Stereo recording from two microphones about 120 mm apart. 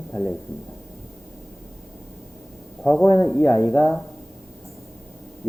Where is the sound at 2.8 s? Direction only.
5° left (ahead or behind).